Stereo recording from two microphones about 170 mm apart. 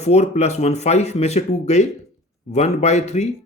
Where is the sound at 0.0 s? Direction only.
40° left (ahead or behind).